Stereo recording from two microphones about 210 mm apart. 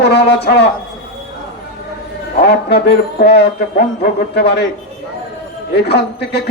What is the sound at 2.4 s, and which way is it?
Speech, 50° left (ahead or behind).